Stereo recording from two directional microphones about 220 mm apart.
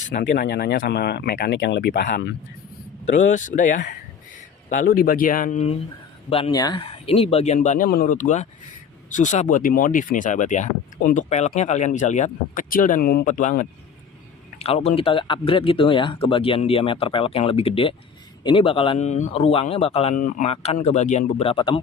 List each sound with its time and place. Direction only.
0.1 s speech: 45° left (ahead or behind)
3.2 s speech: 35° left (ahead or behind)
6.3 s speech: 20° left (ahead or behind)